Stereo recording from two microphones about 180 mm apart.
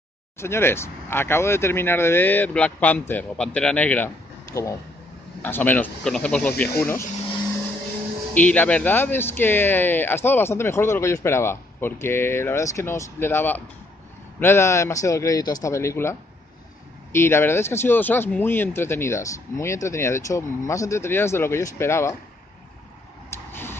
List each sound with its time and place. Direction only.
0.4 s speech: 15° left (ahead or behind)
8.4 s speech: 10° left (ahead or behind)
23.5 s tick-tock: 10° left (ahead or behind)